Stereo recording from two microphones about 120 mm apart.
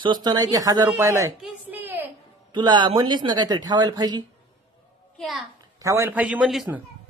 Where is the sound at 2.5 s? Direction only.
40° right (ahead or behind).